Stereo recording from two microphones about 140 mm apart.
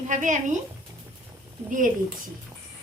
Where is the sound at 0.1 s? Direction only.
65° right (ahead or behind).